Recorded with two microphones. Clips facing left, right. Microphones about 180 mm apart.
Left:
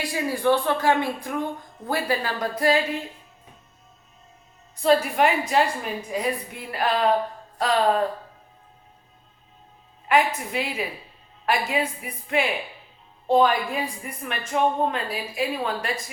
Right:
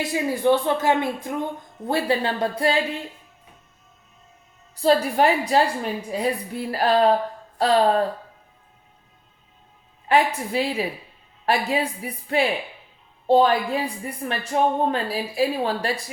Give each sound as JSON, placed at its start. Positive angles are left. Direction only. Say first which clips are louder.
{"t": 0.0, "sound": "speech", "louder": "right 2 dB", "side_deg": -20}
{"t": 4.8, "sound": "a woman's voice", "louder": "right 1 dB", "side_deg": -35}
{"t": 10.1, "sound": "a woman's voice", "louder": "right 2 dB", "side_deg": -30}